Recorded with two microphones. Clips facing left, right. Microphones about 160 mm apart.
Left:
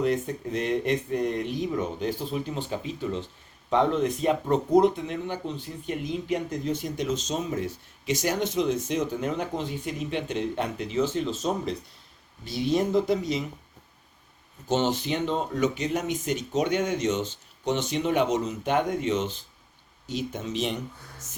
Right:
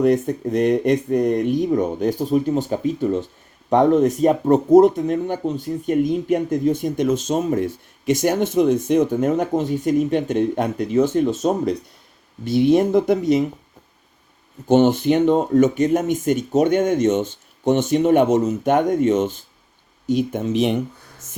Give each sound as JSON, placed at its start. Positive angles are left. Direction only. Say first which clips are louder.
{"t": 0.0, "sound": "speech", "louder": "right 9 dB", "side_deg": -45}
{"t": 14.7, "sound": "speech", "louder": "right 11 dB", "side_deg": -55}